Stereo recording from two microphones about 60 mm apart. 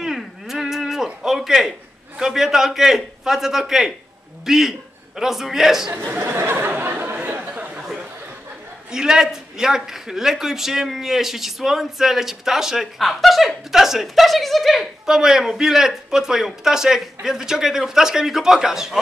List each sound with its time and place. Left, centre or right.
0.0 s a sound: centre
2.1 s a man's voice: centre
6.0 s speech: right
7.2 s chatter: right
8.9 s a man's voice: centre